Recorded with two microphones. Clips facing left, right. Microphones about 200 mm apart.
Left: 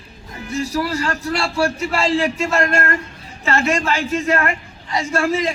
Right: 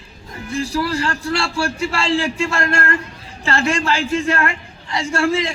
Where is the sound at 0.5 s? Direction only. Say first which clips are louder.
Even; 30° right (ahead or behind).